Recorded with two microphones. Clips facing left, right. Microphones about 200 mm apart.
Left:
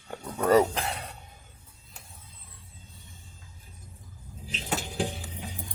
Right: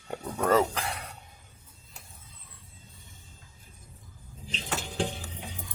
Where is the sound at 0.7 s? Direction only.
25° left (ahead or behind).